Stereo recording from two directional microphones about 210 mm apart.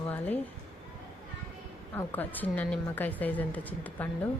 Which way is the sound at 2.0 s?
10° left (ahead or behind).